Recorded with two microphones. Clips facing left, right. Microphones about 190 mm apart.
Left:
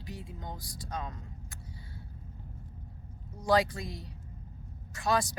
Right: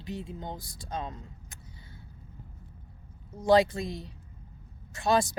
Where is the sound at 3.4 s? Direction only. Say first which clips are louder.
Right 5 dB; 25° right (ahead or behind).